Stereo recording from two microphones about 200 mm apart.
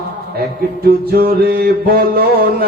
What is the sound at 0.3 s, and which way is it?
Mantra, 50° right (ahead or behind).